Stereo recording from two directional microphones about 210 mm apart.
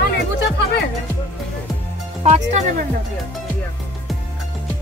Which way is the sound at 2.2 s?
35° right (ahead or behind).